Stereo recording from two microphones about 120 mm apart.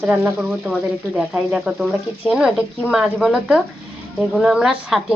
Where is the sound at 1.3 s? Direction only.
5° right (ahead or behind).